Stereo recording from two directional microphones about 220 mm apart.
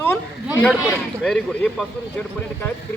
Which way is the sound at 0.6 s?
10° left (ahead or behind).